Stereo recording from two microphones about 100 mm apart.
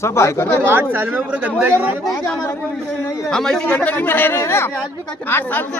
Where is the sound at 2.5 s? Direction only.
20° left (ahead or behind).